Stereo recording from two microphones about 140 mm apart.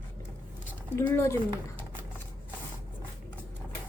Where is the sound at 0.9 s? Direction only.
20° left (ahead or behind).